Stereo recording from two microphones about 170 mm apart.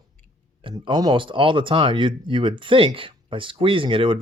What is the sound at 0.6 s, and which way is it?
Speech, 25° right (ahead or behind).